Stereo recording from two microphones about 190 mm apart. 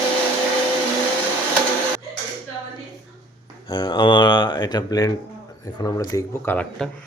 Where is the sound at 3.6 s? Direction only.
25° left (ahead or behind).